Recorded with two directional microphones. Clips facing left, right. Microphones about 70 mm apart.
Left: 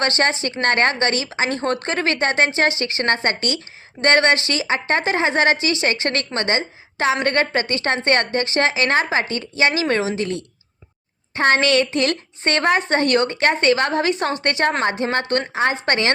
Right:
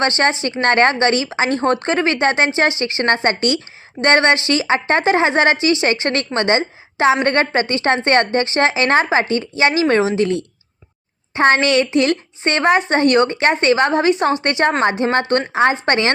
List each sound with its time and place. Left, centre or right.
0.0 s a woman's voice: right
11.3 s a woman's voice: right